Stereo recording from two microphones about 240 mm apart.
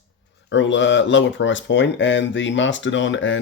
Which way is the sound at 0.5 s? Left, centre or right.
Left.